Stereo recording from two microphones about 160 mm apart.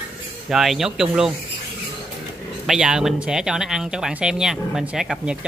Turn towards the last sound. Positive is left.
turn(degrees=-5)  # may be behind; listen again after turning